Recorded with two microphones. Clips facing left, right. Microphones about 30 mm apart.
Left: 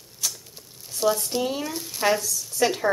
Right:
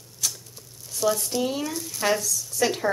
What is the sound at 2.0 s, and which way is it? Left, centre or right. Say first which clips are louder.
Speech: left 2 dB; centre.